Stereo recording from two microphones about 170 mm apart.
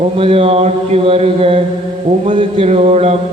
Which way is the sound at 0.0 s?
35° right (ahead or behind).